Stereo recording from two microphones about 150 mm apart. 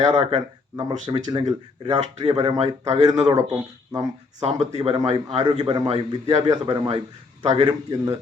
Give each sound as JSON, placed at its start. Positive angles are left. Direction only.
{"t": 0.0, "sound": "speech", "side_deg": -45}
{"t": 0.8, "sound": "speech", "side_deg": -30}
{"t": 1.5, "sound": "a man's voice", "side_deg": -40}
{"t": 2.8, "sound": "speech", "side_deg": -45}
{"t": 3.9, "sound": "speech", "side_deg": -25}
{"t": 4.4, "sound": "a man's voice", "side_deg": -45}
{"t": 7.6, "sound": "speech", "side_deg": -25}